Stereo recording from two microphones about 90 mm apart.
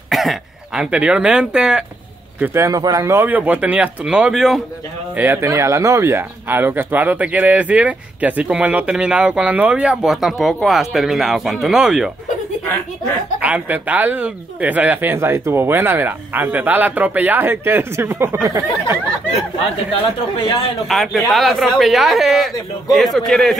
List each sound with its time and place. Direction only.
0.1 s throat clearing: centre (ahead or behind)
0.9 s speech: 15° right (ahead or behind)
2.4 s speech: 30° right (ahead or behind)
2.7 s speech: 45° right (ahead or behind)
3.1 s speech: 20° right (ahead or behind); by 4.6 s 5° right (ahead or behind)
5.1 s speech: 20° right (ahead or behind)
5.5 s speech: 35° right (ahead or behind); by 12.1 s 5° right (ahead or behind)
13.4 s speech: 15° right (ahead or behind); by 18.9 s 35° right (ahead or behind)
20.3 s a man's voice: 70° left (ahead or behind)
20.9 s speech: centre (ahead or behind)